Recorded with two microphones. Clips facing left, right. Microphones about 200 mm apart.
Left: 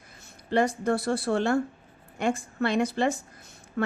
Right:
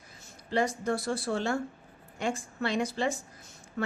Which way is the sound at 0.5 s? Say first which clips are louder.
Left 4 dB; 55° left (ahead or behind).